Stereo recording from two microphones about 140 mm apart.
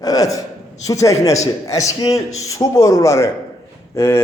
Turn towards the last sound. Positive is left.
turn(degrees=20)  # may be behind; listen again after turning